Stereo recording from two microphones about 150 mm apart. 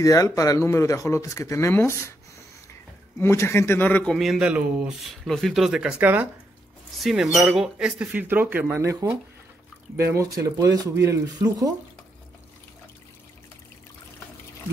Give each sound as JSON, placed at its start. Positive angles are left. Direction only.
{"t": 0.0, "sound": "speech", "side_deg": 20}
{"t": 3.2, "sound": "speech", "side_deg": 15}